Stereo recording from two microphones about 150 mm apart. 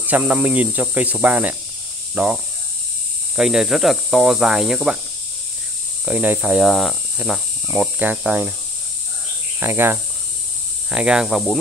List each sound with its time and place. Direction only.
0.0 s speech: 10° right (ahead or behind)
6.0 s speech: 10° right (ahead or behind)
9.6 s speech: 15° right (ahead or behind)